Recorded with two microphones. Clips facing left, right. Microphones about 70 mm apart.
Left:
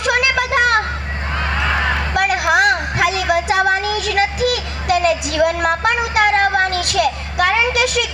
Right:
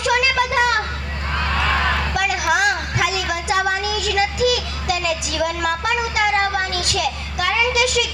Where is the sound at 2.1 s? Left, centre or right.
Left.